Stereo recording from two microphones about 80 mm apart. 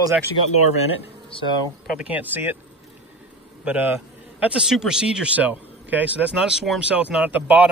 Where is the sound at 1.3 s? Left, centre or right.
Left.